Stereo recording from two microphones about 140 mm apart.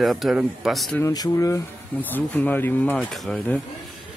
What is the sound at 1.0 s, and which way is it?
Speech, 25° left (ahead or behind).